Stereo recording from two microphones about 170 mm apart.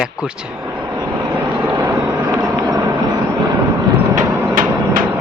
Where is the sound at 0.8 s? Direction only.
20° right (ahead or behind).